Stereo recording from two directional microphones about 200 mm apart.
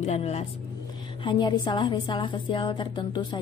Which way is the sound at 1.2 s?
20° left (ahead or behind).